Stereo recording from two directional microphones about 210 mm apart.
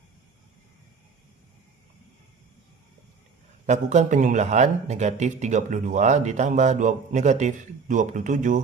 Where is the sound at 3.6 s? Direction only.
35° right (ahead or behind).